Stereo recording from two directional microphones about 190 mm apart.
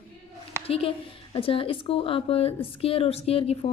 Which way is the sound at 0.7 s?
30° left (ahead or behind).